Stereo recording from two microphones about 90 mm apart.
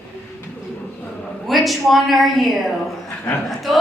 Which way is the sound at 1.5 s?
Centre (ahead or behind).